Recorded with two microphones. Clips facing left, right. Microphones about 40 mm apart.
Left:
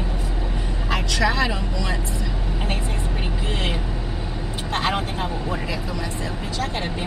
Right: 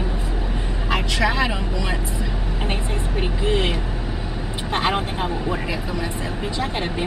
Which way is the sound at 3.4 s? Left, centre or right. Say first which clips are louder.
Right 7 dB; centre.